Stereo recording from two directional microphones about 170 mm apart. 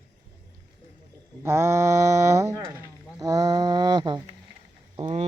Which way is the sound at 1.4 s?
15° right (ahead or behind).